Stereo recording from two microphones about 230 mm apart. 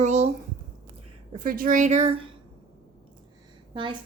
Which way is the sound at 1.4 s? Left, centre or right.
Right.